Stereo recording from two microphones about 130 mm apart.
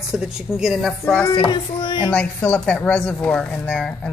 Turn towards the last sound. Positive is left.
turn(degrees=5)  # may be behind; listen again after turning